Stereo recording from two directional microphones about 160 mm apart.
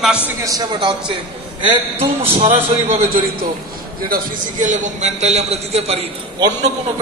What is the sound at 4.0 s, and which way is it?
A man's voice, 60° right (ahead or behind).